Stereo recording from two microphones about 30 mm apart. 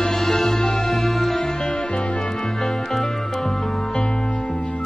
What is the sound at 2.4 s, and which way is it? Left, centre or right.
Music, centre.